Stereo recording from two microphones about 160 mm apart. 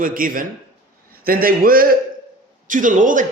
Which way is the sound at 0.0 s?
60° right (ahead or behind).